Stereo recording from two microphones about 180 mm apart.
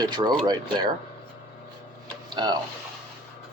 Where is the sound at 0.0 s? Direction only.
25° right (ahead or behind).